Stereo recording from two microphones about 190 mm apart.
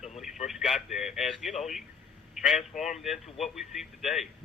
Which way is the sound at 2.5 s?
40° left (ahead or behind).